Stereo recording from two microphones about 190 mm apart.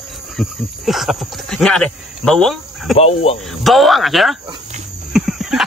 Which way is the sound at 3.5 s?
Centre (ahead or behind).